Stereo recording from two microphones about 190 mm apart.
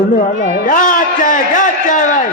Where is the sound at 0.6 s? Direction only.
45° left (ahead or behind).